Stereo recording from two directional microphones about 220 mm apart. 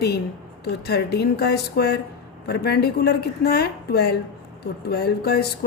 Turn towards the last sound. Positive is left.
turn(degrees=45)  # may be behind; listen again after turning